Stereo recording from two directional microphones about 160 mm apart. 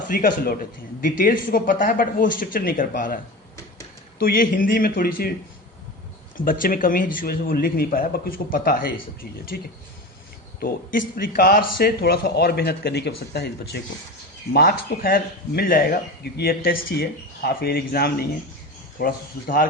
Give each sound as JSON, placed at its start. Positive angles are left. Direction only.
{"t": 0.1, "sound": "speech", "side_deg": 60}
{"t": 4.2, "sound": "speech", "side_deg": 65}
{"t": 6.3, "sound": "speech", "side_deg": 60}
{"t": 14.5, "sound": "speech", "side_deg": 70}